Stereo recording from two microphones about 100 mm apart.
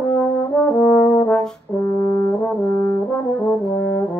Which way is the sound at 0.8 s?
35° left (ahead or behind).